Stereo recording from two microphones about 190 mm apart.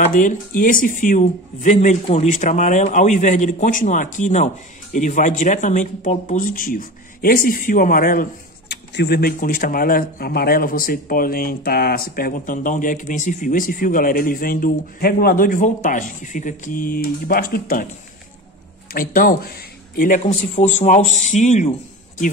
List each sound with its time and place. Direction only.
0.0 s speech: 45° left (ahead or behind)
18.9 s speech: 50° left (ahead or behind)